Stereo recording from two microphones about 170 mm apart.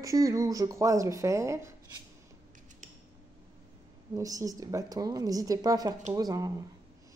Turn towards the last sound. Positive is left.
turn(degrees=-20)  # may be behind; listen again after turning